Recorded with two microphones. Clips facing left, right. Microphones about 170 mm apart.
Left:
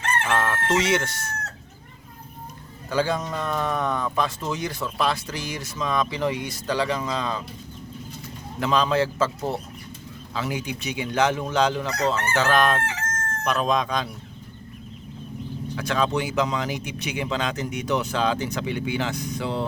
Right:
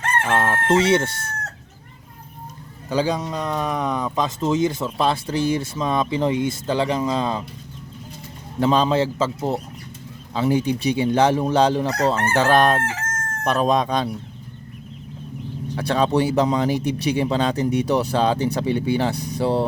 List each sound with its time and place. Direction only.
0.3 s speech: 30° right (ahead or behind)
2.9 s speech: 15° right (ahead or behind)
8.5 s speech: 30° right (ahead or behind)
10.3 s speech: 30° right (ahead or behind)
12.9 s crowing: 50° right (ahead or behind)
13.5 s speech: 35° right (ahead or behind)
15.7 s speech: 35° right (ahead or behind)